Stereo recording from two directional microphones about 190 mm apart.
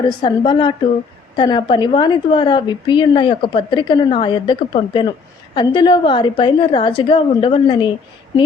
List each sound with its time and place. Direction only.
0.0 s a woman's voice: 25° left (ahead or behind)